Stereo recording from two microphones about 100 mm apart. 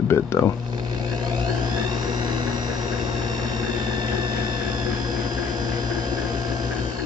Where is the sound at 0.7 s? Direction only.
45° right (ahead or behind).